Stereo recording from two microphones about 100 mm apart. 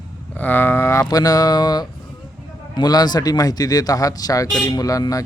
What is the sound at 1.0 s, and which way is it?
Speech, 40° left (ahead or behind).